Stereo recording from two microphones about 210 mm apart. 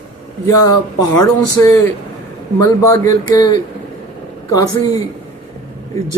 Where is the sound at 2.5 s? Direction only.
15° left (ahead or behind).